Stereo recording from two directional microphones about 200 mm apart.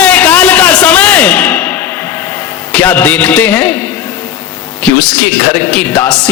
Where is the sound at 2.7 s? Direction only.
10° left (ahead or behind).